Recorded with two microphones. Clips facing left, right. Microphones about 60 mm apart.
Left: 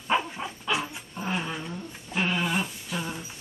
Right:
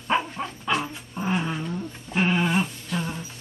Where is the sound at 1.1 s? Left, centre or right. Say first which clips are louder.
Right 4 dB; centre.